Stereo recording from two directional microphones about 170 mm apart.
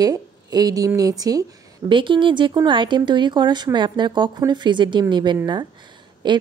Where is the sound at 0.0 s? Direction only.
25° right (ahead or behind).